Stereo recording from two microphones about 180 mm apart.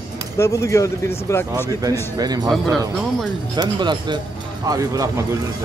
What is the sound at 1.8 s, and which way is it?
Speech, 20° right (ahead or behind).